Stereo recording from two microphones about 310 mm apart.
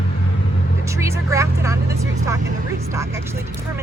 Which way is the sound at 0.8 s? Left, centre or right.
Centre.